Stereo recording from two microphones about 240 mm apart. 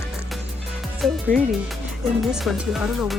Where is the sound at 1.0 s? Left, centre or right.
Centre.